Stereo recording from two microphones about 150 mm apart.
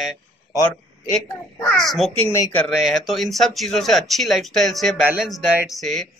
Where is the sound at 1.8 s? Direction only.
Centre (ahead or behind).